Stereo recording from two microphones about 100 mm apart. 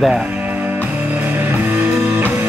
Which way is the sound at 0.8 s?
20° right (ahead or behind).